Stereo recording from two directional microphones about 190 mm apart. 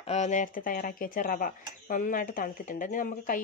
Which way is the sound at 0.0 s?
35° left (ahead or behind).